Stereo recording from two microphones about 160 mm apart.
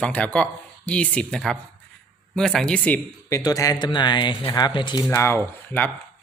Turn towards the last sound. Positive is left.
turn(degrees=15)  # may be behind; listen again after turning